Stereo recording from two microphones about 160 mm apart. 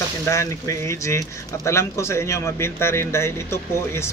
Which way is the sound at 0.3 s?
20° left (ahead or behind).